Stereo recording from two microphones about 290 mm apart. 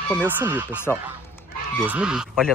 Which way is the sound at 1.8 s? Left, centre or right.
Centre.